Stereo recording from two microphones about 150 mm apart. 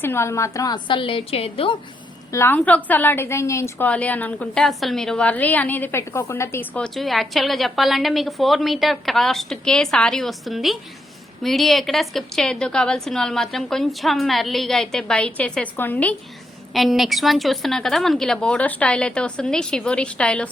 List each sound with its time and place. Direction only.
0.0 s a woman's voice: 15° left (ahead or behind); by 1.8 s 35° left (ahead or behind)
2.3 s a woman's voice: 15° left (ahead or behind)
16.7 s a woman's voice: centre (ahead or behind)